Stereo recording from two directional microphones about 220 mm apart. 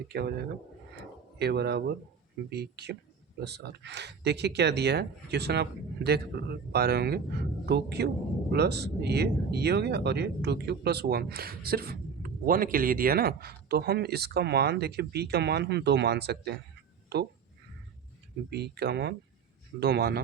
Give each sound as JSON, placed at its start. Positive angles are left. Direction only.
{"t": 0.1, "sound": "speech", "side_deg": -45}
{"t": 18.5, "sound": "speech", "side_deg": -45}